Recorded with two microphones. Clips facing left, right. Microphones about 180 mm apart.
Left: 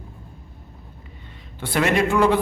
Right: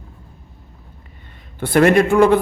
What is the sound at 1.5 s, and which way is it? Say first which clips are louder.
Speech: right 7 dB; 50° right (ahead or behind).